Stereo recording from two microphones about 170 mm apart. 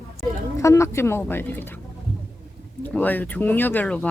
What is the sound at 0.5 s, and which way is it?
Speech, 15° left (ahead or behind).